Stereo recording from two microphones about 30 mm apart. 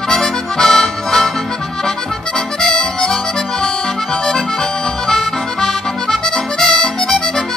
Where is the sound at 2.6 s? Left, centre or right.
Left.